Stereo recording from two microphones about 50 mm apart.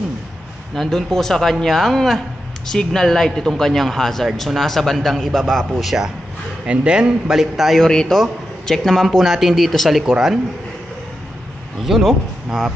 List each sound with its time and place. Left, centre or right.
0.7 s a man's voice: centre
6.6 s a man's voice: right; by 7.8 s centre
7.8 s a man's voice: centre
11.8 s a man's voice: centre